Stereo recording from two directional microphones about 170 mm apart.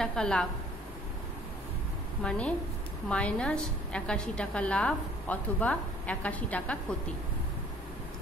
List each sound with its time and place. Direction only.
0.0 s a woman's voice: 5° left (ahead or behind)
2.2 s a woman's voice: 5° left (ahead or behind)